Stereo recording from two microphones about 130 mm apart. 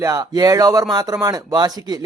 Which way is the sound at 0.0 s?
25° right (ahead or behind).